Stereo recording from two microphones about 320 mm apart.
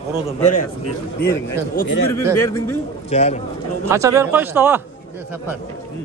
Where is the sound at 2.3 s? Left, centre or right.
Centre.